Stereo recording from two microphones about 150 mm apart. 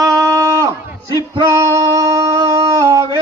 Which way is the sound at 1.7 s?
20° right (ahead or behind).